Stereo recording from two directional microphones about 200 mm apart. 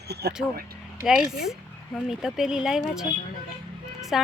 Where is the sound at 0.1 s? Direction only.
55° right (ahead or behind).